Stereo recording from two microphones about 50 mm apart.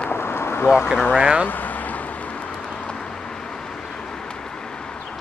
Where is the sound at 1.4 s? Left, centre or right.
Left.